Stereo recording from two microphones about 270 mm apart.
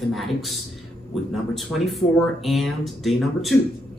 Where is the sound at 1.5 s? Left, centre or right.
Centre.